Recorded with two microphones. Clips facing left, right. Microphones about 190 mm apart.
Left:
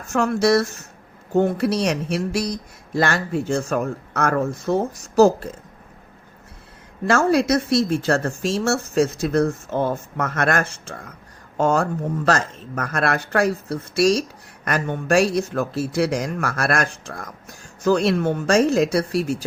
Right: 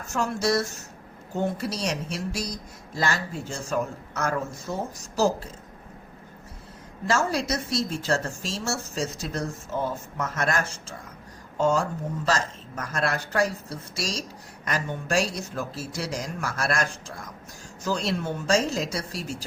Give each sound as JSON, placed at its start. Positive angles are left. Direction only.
{"t": 0.1, "sound": "speech", "side_deg": 65}
{"t": 7.1, "sound": "speech", "side_deg": 60}